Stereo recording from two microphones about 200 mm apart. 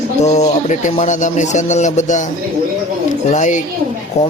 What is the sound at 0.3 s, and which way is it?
A man's voice, 35° left (ahead or behind).